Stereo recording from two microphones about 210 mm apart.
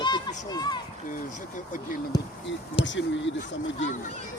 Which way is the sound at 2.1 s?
20° left (ahead or behind).